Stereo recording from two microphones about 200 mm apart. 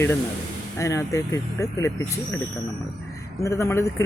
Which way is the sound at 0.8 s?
15° left (ahead or behind).